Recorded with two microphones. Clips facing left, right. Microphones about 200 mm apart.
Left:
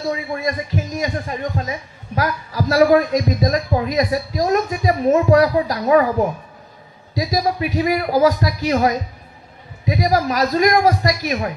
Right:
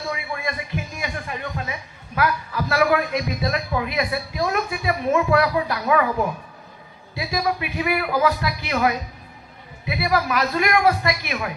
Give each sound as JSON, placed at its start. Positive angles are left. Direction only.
{"t": 0.1, "sound": "a man's voice", "side_deg": 35}